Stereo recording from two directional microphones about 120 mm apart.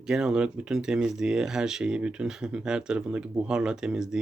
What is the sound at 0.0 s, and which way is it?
Speech, 5° right (ahead or behind).